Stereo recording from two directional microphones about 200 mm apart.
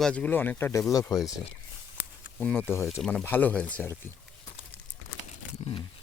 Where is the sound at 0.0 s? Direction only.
5° left (ahead or behind).